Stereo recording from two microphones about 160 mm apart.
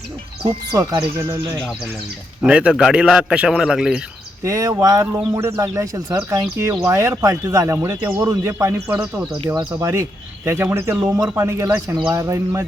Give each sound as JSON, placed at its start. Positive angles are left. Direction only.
{"t": 0.4, "sound": "speech", "side_deg": -20}
{"t": 2.4, "sound": "a man's voice", "side_deg": -5}
{"t": 4.4, "sound": "speech", "side_deg": -20}